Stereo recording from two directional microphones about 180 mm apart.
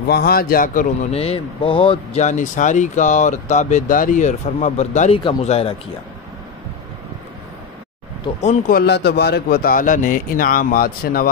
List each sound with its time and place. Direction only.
0.1 s speech: 55° left (ahead or behind)
1.1 s speech: 35° left (ahead or behind)
2.2 s speech: 45° left (ahead or behind)
8.4 s speech: 40° left (ahead or behind)
8.7 s speech: 70° left (ahead or behind)